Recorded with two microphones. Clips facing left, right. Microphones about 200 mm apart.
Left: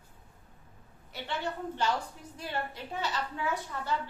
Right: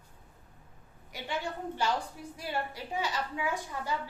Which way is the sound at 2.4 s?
10° right (ahead or behind).